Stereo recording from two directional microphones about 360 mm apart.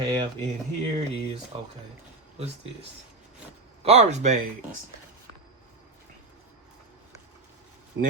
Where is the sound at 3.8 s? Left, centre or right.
Centre.